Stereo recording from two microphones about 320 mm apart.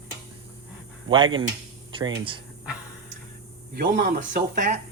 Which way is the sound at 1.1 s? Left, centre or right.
Centre.